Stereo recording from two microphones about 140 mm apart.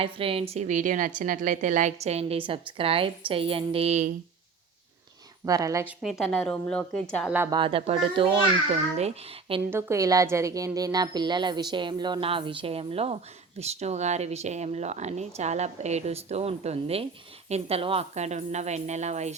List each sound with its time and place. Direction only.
0.0 s a woman's voice: 45° right (ahead or behind)
5.5 s a woman's voice: 25° right (ahead or behind)
5.8 s a woman's voice: centre (ahead or behind)
7.3 s a woman's voice: 15° right (ahead or behind)
7.5 s a child's voice: 40° right (ahead or behind)
9.6 s a woman's voice: 20° right (ahead or behind); by 19.3 s 55° right (ahead or behind)